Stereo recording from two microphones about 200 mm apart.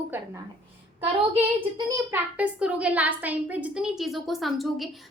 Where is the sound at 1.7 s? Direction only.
15° right (ahead or behind).